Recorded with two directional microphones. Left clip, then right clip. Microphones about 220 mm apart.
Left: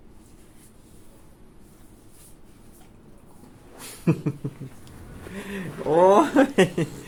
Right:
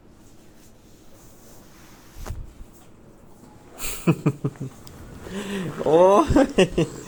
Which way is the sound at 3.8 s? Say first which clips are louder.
Right 3 dB; 20° right (ahead or behind).